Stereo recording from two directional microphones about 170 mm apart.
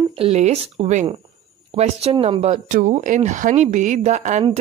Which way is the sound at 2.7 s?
45° right (ahead or behind).